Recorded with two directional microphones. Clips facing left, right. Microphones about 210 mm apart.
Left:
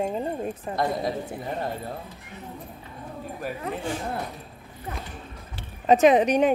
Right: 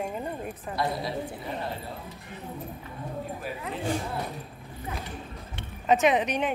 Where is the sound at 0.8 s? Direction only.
50° left (ahead or behind).